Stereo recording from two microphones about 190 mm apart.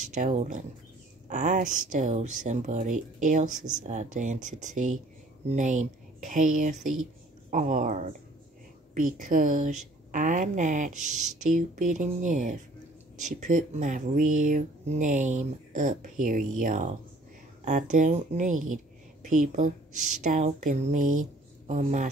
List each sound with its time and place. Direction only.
0.1 s speech: 40° right (ahead or behind)